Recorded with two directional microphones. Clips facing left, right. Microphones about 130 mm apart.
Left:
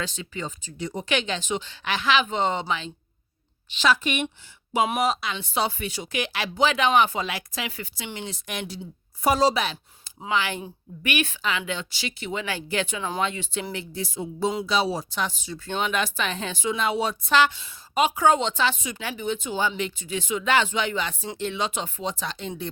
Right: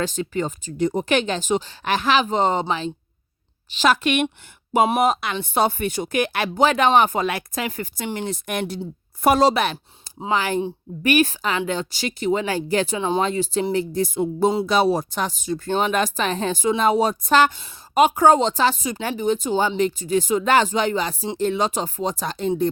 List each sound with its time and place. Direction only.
0.0 s a woman's voice: 45° right (ahead or behind)
3.9 s a woman's voice: 75° right (ahead or behind)
4.9 s a woman's voice: 50° right (ahead or behind)
10.0 s speech: 40° right (ahead or behind)
13.0 s speech: 25° right (ahead or behind)
13.2 s speech: 40° right (ahead or behind)